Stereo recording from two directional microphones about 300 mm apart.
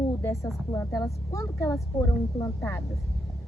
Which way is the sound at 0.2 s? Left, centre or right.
Centre.